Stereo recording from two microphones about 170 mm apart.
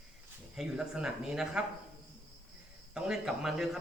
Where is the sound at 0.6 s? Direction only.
5° right (ahead or behind).